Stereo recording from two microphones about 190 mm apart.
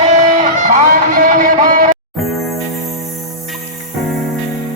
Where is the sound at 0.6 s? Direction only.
50° right (ahead or behind).